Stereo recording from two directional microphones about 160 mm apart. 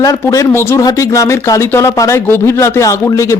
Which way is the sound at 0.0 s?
20° left (ahead or behind).